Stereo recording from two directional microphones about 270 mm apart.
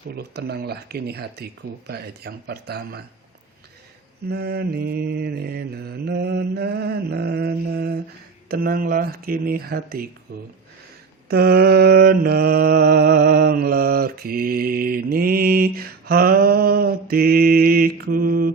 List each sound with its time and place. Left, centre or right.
0.2 s mantra: right
4.3 s mantra: right